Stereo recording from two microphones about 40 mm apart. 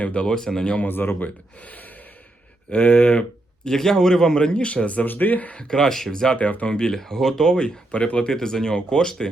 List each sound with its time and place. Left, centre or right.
0.0 s speech: left
0.3 s a man's voice: centre
0.9 s speech: left
1.6 s gasp: left
2.6 s speech: left
3.6 s a man's voice: centre; by 5.0 s left
5.0 s speech: left
5.5 s a man's voice: centre
6.9 s a man's voice: centre
7.9 s speech: left
8.3 s a man's voice: centre